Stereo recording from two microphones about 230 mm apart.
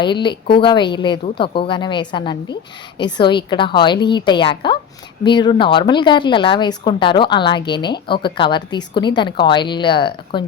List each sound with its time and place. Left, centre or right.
0.0 s speech: centre